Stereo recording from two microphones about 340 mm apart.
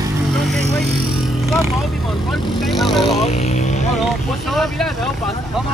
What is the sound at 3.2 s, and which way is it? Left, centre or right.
Vehicle, centre.